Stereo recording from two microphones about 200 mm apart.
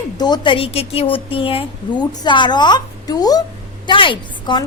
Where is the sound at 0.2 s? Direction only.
20° left (ahead or behind).